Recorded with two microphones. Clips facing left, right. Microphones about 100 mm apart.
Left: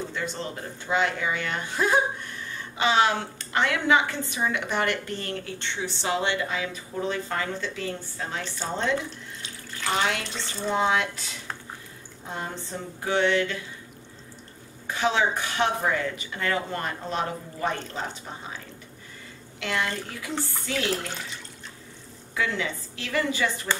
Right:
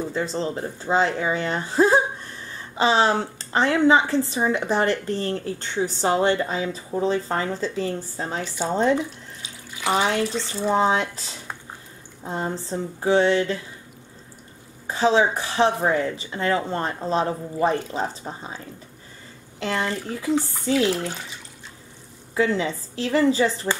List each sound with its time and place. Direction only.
0.1 s speech: 30° right (ahead or behind)
9.4 s bathtub: 10° right (ahead or behind)
10.2 s speech: 5° right (ahead or behind)
10.7 s speech: 35° right (ahead or behind)
14.9 s speech: 30° right (ahead or behind)
19.6 s speech: 35° right (ahead or behind)
22.3 s speech: 30° right (ahead or behind)